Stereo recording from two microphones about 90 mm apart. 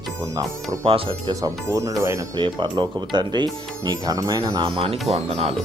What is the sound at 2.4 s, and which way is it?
Speech, 60° right (ahead or behind).